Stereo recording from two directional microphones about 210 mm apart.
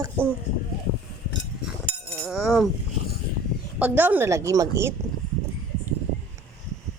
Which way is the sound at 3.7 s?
10° right (ahead or behind).